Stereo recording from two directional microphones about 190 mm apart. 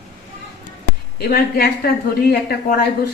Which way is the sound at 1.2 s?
55° left (ahead or behind).